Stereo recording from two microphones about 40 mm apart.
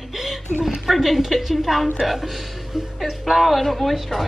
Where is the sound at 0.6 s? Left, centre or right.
Centre.